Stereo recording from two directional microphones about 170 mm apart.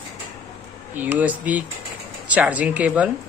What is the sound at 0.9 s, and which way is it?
A woman's voice, 10° right (ahead or behind).